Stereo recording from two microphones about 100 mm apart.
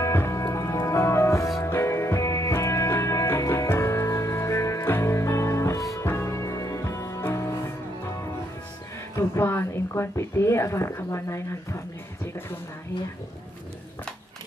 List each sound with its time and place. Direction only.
0.0 s music: 25° left (ahead or behind)
9.1 s speech: 25° left (ahead or behind)